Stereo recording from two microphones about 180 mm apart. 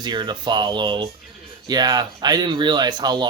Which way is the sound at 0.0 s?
25° right (ahead or behind).